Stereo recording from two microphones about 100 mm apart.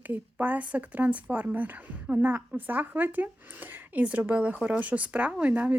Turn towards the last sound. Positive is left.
turn(degrees=-15)  # may be behind; listen again after turning